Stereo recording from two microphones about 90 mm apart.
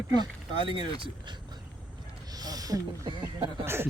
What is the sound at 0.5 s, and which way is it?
Speech, 70° right (ahead or behind).